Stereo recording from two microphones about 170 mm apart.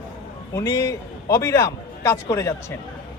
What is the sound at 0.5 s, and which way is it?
A man's voice, 20° left (ahead or behind).